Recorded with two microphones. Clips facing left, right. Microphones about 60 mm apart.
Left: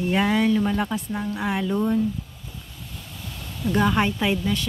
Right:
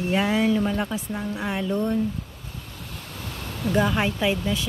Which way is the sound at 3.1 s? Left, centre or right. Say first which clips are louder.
Right 3 dB; right.